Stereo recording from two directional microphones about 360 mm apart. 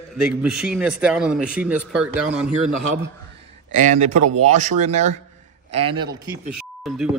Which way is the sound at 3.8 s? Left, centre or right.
Centre.